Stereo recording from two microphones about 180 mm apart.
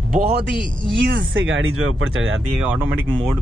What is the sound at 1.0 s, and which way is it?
Speech, 80° right.